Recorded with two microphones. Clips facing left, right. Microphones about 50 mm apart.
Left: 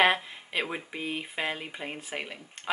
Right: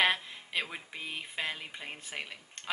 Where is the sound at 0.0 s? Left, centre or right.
Centre.